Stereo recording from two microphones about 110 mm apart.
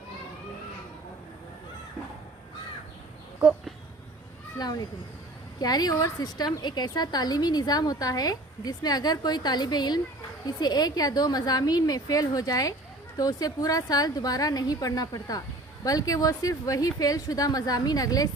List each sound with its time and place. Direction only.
4.5 s a woman's voice: 35° left (ahead or behind)